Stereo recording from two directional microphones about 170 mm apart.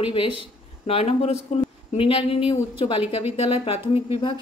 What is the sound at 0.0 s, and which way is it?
Speech, 30° left (ahead or behind).